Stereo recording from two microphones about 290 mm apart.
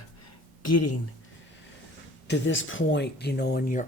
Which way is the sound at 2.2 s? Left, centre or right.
Left.